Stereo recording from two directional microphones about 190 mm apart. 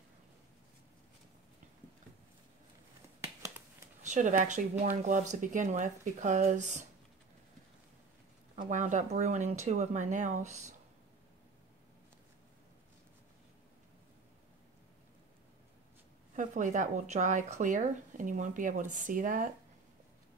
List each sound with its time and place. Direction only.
3.2 s finger snapping: 15° right (ahead or behind)
4.0 s speech: 40° right (ahead or behind)
8.5 s speech: 40° right (ahead or behind)
16.3 s speech: 40° right (ahead or behind)